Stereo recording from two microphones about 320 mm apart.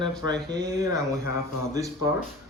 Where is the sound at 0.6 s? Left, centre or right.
Centre.